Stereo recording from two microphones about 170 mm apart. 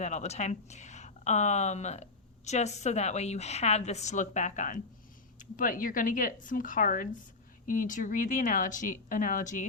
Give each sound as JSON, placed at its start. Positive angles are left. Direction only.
{"t": 0.0, "sound": "speech", "side_deg": 40}